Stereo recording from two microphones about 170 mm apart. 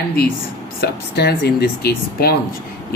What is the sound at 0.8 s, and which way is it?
Speech, 70° left (ahead or behind).